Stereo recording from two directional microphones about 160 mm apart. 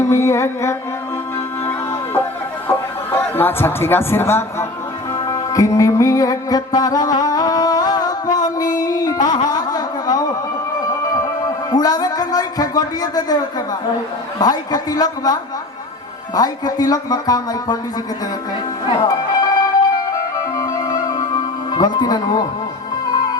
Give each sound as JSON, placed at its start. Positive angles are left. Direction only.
{"t": 0.0, "sound": "music", "side_deg": 15}
{"t": 3.3, "sound": "a man's voice", "side_deg": 15}
{"t": 5.1, "sound": "music", "side_deg": 25}
{"t": 11.7, "sound": "a sound", "side_deg": 25}
{"t": 14.3, "sound": "speech", "side_deg": 25}
{"t": 19.0, "sound": "music", "side_deg": 25}
{"t": 21.7, "sound": "speech", "side_deg": 25}